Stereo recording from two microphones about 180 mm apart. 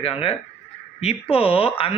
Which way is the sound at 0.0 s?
30° left (ahead or behind).